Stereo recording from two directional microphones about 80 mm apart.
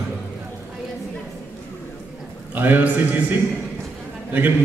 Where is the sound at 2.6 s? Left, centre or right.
Right.